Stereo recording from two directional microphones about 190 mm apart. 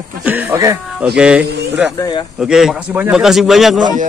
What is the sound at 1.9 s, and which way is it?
Speech, 20° left (ahead or behind).